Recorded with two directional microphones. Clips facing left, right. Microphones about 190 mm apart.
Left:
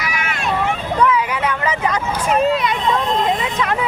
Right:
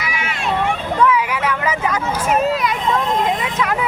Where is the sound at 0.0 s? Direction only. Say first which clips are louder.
Left 1 dB; 25° right (ahead or behind).